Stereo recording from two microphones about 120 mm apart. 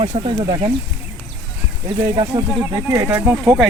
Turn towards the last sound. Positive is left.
turn(degrees=-10)  # may be behind; listen again after turning